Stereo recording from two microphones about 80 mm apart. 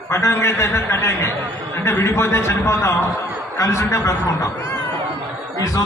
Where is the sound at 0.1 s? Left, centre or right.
Left.